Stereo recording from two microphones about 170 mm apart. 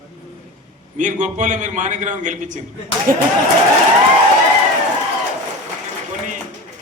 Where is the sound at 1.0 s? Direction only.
45° right (ahead or behind).